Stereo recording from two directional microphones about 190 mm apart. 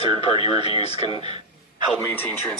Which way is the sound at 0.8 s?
35° left (ahead or behind).